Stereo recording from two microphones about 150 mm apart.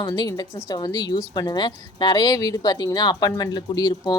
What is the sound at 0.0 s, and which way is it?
Speech, 25° left (ahead or behind).